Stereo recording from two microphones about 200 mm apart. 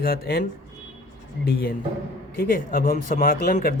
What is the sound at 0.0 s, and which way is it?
Speech, 50° left (ahead or behind).